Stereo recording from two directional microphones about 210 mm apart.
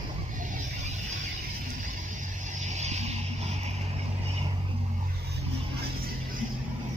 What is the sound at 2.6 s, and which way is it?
Vehicle, 35° right (ahead or behind).